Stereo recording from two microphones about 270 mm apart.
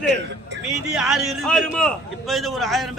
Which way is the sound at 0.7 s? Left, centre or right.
Centre.